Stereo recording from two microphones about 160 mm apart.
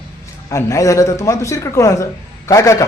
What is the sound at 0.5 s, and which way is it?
A man's voice, 20° left (ahead or behind).